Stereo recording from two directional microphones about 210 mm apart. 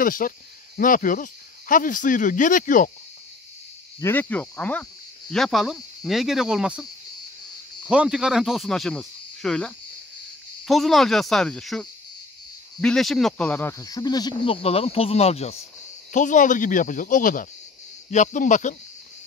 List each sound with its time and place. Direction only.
0.0 s speech: 40° left (ahead or behind)
4.0 s speech: 10° left (ahead or behind); by 18.8 s 35° left (ahead or behind)